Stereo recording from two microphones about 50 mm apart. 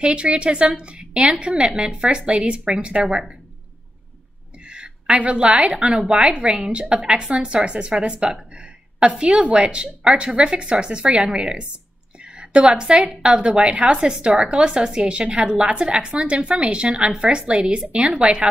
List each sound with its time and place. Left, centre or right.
0.0 s a woman's voice: right
3.0 s speech: centre
4.6 s a sound: centre
5.2 s a woman's voice: right